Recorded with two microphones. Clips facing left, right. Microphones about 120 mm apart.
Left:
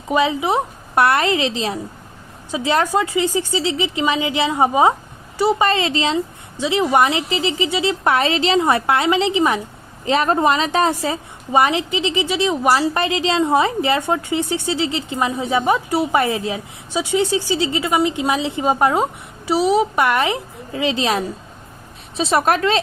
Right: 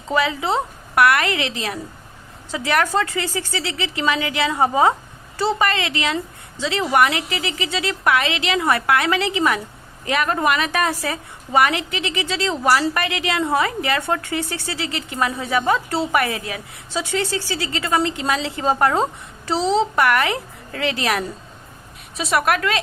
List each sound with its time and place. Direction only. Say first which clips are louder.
0.1 s speech: left 3 dB; 20° left (ahead or behind)
0.9 s a woman's voice: left 1 dB; 30° left (ahead or behind)
5.6 s a woman's voice: left 4 dB; 25° left (ahead or behind)